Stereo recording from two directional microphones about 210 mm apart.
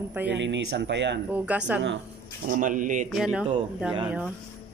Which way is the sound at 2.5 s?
40° right (ahead or behind).